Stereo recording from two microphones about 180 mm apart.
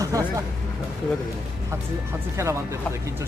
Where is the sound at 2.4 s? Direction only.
15° right (ahead or behind).